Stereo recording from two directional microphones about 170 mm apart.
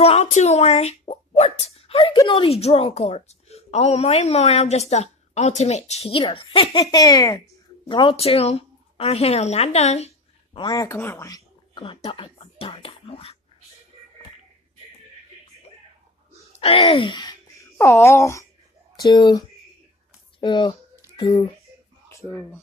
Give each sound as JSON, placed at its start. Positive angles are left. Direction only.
{"t": 0.0, "sound": "a woman's voice", "side_deg": 40}
{"t": 10.7, "sound": "speech", "side_deg": 15}
{"t": 16.5, "sound": "speech", "side_deg": 35}
{"t": 22.1, "sound": "a sound", "side_deg": 15}